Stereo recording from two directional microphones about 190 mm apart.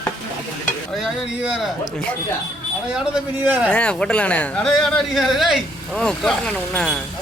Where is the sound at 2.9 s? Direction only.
5° right (ahead or behind).